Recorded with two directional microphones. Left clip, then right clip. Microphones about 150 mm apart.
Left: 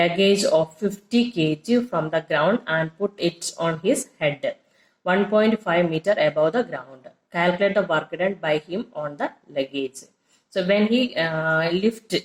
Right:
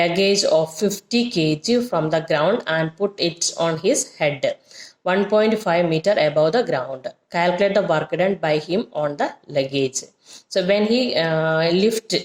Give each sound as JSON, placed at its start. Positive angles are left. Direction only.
{"t": 0.0, "sound": "speech", "side_deg": -45}